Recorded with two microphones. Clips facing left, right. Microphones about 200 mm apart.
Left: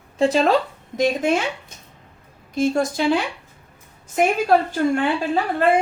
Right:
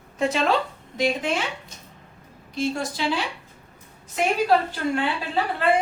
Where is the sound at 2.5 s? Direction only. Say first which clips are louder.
Left 6 dB; 45° left (ahead or behind).